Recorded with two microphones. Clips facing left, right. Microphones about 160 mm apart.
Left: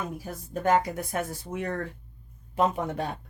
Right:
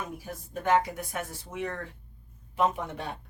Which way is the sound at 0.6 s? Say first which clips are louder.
Left 1 dB; 40° left (ahead or behind).